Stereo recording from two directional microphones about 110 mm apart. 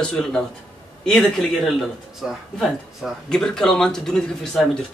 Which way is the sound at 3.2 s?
5° left (ahead or behind).